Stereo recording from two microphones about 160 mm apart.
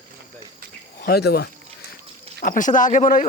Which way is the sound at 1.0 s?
85° left.